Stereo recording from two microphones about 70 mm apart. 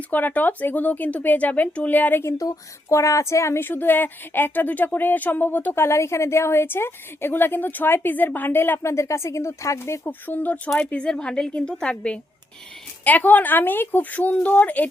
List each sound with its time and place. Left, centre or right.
0.1 s speech: left
2.9 s a woman's voice: left
10.1 s speech: left
10.8 s a woman's voice: centre